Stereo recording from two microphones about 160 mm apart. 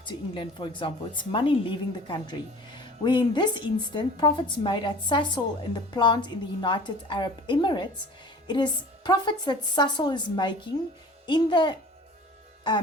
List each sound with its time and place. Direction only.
0.0 s a woman's voice: 30° left (ahead or behind)